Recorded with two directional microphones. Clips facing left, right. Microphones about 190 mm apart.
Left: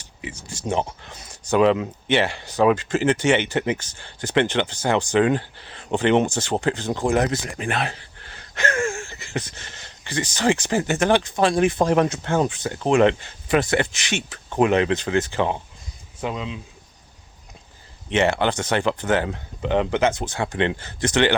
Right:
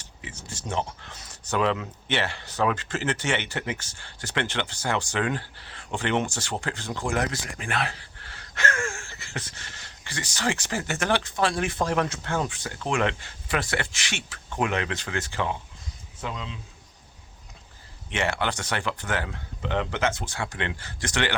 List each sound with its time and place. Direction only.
0.0 s a man's voice: 15° left (ahead or behind)
18.1 s speech: 25° left (ahead or behind)